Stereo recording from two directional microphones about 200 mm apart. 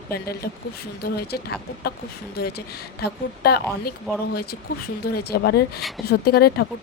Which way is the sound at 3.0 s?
50° left (ahead or behind).